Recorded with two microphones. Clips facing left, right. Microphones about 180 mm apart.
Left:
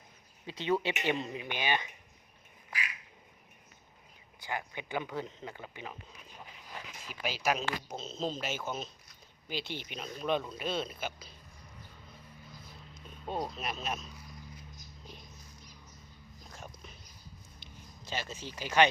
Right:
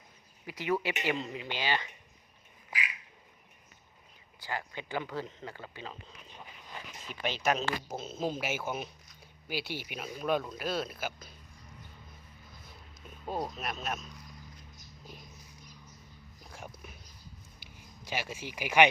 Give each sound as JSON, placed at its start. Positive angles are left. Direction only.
{"t": 0.4, "sound": "speech", "side_deg": 25}
{"t": 4.4, "sound": "speech", "side_deg": 15}
{"t": 7.9, "sound": "a man's voice", "side_deg": -10}
{"t": 13.2, "sound": "speech", "side_deg": 0}
{"t": 16.4, "sound": "dog", "side_deg": -10}
{"t": 17.6, "sound": "a sound", "side_deg": -10}